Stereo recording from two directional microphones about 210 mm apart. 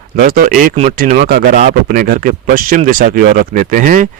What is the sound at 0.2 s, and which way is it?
Speech, 40° right (ahead or behind).